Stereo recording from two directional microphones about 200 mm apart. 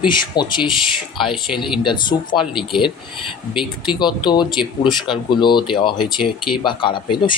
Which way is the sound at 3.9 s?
20° left (ahead or behind).